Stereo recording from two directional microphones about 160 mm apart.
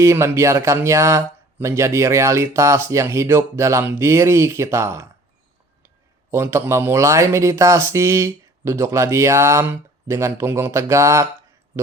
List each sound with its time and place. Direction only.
0.0 s speech: 20° right (ahead or behind)
6.3 s speech: 15° right (ahead or behind)